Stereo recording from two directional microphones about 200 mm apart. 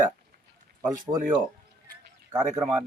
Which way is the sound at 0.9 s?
20° right (ahead or behind).